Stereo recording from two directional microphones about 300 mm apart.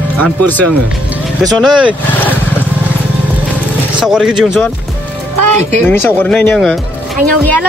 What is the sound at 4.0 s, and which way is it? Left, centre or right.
Speech, centre.